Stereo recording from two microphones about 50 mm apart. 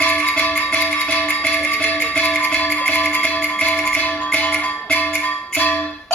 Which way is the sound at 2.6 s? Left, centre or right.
Left.